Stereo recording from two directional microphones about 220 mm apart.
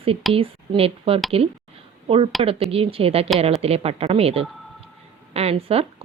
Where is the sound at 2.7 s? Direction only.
25° right (ahead or behind).